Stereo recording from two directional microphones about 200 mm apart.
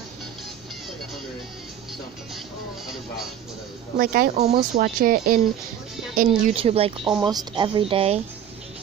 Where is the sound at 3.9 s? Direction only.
45° right (ahead or behind).